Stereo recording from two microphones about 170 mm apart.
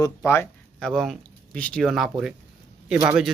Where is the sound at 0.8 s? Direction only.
5° left (ahead or behind).